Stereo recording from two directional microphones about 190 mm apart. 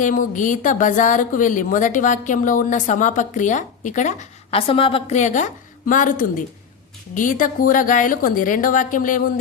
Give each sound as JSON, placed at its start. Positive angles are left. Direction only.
{"t": 0.0, "sound": "a woman's voice", "side_deg": 45}